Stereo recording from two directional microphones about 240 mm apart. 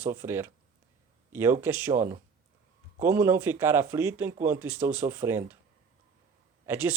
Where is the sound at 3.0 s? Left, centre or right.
Centre.